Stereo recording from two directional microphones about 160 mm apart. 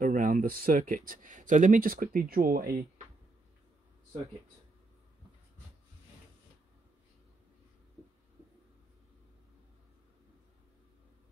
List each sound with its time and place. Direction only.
0.0 s speech: 60° right (ahead or behind)